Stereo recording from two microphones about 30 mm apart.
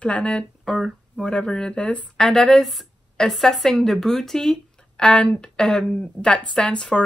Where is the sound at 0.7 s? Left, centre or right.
Centre.